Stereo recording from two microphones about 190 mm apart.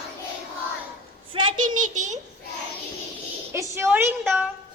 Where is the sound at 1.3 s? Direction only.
30° right (ahead or behind).